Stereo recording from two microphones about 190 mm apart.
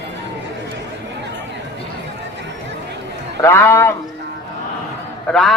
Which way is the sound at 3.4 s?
10° left (ahead or behind).